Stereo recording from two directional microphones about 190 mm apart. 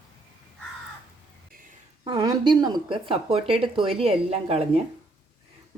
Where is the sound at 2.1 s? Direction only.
20° right (ahead or behind).